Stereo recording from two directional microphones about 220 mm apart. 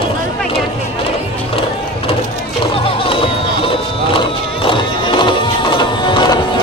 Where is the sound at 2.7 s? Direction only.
25° left (ahead or behind).